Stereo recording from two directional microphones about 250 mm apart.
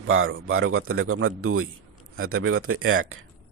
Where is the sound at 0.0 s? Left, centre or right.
Right.